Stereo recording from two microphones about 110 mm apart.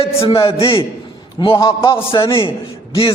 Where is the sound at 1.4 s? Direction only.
45° left (ahead or behind).